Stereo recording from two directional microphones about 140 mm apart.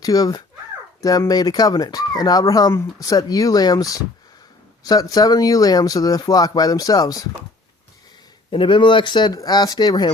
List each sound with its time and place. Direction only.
0.0 s speech: 25° left (ahead or behind)
8.4 s speech: 35° left (ahead or behind)